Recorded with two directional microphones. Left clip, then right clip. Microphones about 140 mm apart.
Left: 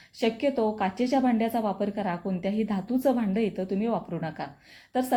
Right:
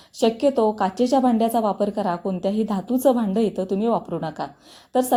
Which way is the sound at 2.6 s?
30° right (ahead or behind).